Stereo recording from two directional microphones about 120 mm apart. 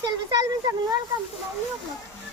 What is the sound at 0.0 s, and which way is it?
Speech, 35° right (ahead or behind).